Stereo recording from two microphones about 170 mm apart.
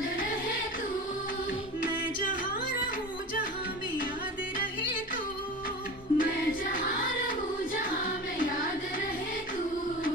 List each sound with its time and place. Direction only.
6.1 s music: 55° left (ahead or behind)